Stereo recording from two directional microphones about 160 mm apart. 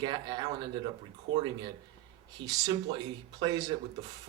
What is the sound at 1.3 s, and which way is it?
Speech, 90° right.